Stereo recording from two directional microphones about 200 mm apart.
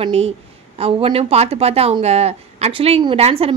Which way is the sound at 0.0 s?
30° right (ahead or behind).